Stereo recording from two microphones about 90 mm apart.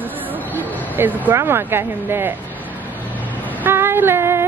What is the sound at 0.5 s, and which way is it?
Vehicle, 20° right (ahead or behind).